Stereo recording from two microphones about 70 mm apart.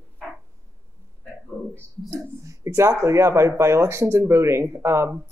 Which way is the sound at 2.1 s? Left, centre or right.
Right.